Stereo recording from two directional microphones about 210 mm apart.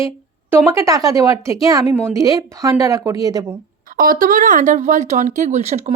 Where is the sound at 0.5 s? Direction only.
10° right (ahead or behind).